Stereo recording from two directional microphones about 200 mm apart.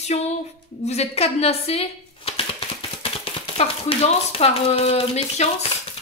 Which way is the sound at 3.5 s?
30° left (ahead or behind).